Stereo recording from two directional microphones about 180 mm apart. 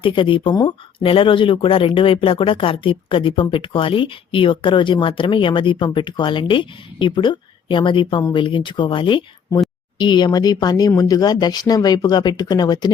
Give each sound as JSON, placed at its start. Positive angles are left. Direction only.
{"t": 0.0, "sound": "speech", "side_deg": 30}